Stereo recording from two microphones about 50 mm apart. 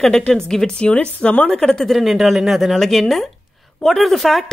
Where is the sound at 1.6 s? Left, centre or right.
Centre.